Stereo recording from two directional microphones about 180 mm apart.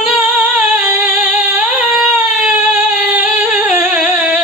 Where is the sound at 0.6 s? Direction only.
Centre (ahead or behind).